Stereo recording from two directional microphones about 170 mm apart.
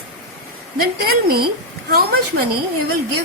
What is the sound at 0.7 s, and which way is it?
A woman's voice, 60° right (ahead or behind).